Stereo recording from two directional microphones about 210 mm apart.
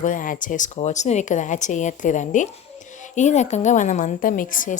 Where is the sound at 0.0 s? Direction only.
40° left (ahead or behind).